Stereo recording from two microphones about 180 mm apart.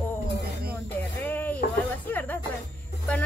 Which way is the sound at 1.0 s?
10° left (ahead or behind).